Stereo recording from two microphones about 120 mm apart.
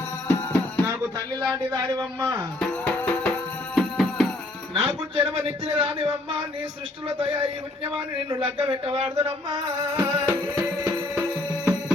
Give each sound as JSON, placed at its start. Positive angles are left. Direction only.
{"t": 0.3, "sound": "music", "side_deg": 20}
{"t": 1.4, "sound": "speech", "side_deg": -30}
{"t": 2.6, "sound": "music", "side_deg": 15}
{"t": 3.8, "sound": "music", "side_deg": 0}
{"t": 4.7, "sound": "a man's voice", "side_deg": -45}
{"t": 7.2, "sound": "a man's voice", "side_deg": -45}
{"t": 10.0, "sound": "music", "side_deg": -25}